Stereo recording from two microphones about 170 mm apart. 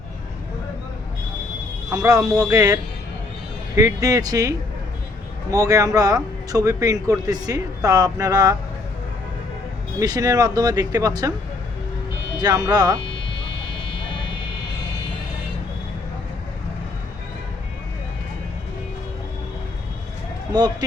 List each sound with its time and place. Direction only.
1.9 s speech: 20° right (ahead or behind)
3.8 s speech: 20° right (ahead or behind)
10.0 s speech: 20° right (ahead or behind)
12.4 s speech: 20° right (ahead or behind)
13.0 s a sound: 90° left